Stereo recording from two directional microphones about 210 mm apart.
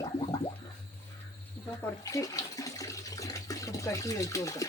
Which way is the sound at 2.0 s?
15° left (ahead or behind).